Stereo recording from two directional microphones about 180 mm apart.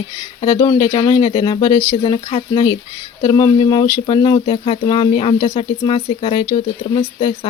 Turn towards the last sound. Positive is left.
turn(degrees=30)  # may be behind; listen again after turning